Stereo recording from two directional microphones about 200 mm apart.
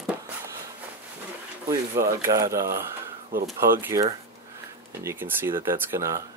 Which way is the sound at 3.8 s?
15° right (ahead or behind).